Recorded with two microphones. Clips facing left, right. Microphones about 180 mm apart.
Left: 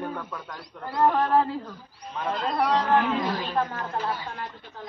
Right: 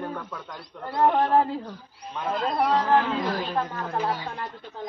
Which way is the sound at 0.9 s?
20° right (ahead or behind).